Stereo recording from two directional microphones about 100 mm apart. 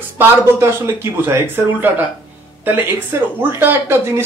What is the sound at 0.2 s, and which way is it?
Speech, 25° right (ahead or behind).